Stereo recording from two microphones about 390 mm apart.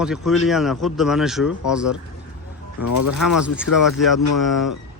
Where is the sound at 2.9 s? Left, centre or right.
Left.